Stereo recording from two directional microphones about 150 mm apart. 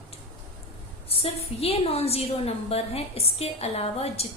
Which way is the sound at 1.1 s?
40° left (ahead or behind).